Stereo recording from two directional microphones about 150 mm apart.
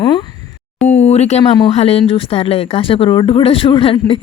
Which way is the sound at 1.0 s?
45° left (ahead or behind).